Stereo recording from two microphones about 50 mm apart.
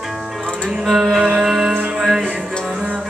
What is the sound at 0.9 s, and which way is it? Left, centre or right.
Music, centre.